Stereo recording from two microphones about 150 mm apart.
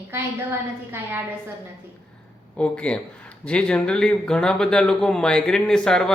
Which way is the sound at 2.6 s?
5° left (ahead or behind).